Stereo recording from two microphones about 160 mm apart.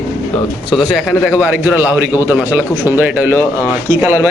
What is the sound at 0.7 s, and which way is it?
A man's voice, centre (ahead or behind).